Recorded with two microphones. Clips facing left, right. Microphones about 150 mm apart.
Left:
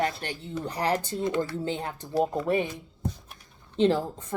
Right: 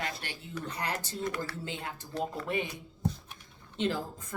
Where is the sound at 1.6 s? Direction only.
35° left (ahead or behind).